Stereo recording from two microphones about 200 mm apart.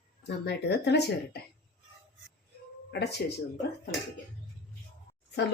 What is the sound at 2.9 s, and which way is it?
Speech, 55° left (ahead or behind).